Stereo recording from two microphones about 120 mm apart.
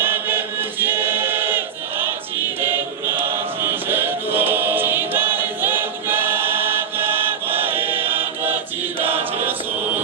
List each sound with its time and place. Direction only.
0.0 s choir: 15° right (ahead or behind)